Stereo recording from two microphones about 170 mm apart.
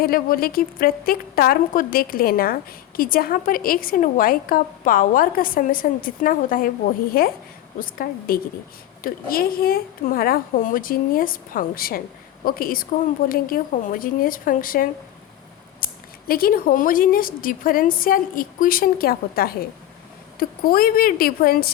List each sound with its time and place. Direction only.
0.0 s a woman's voice: 60° left (ahead or behind)